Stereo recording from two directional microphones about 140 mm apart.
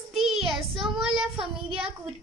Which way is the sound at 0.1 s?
Centre (ahead or behind).